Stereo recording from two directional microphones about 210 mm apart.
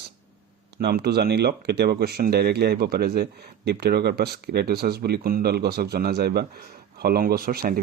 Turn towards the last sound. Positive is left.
turn(degrees=-45)  # may be behind; listen again after turning